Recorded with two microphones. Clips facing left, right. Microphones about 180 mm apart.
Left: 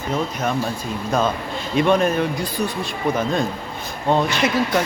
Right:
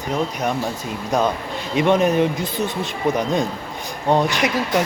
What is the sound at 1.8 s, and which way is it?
Speech, 20° right (ahead or behind).